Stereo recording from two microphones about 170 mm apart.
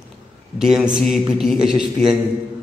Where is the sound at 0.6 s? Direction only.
5° right (ahead or behind).